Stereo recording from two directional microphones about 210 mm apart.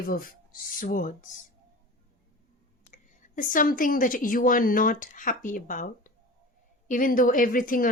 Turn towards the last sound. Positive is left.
turn(degrees=40)  # may be behind; listen again after turning